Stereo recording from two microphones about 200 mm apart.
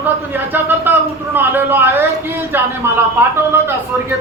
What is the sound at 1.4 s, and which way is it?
Speech, 10° right (ahead or behind).